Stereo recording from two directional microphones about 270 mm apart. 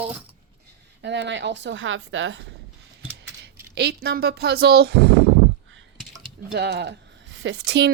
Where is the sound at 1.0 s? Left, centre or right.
Right.